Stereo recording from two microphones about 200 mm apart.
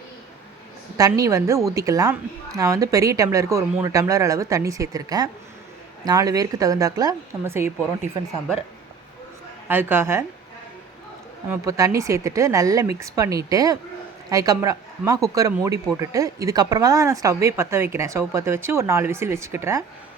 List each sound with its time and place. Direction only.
0.9 s speech: 15° right (ahead or behind)
9.6 s speech: 10° right (ahead or behind)
11.4 s speech: 15° right (ahead or behind)